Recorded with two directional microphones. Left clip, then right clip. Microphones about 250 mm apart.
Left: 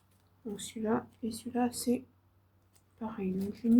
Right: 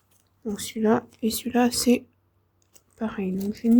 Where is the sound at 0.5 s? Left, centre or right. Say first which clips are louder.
Right 10 dB; right.